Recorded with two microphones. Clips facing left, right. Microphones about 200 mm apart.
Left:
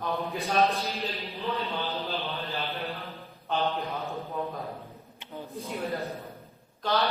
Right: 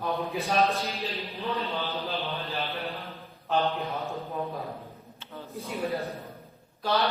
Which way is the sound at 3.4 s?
Centre (ahead or behind).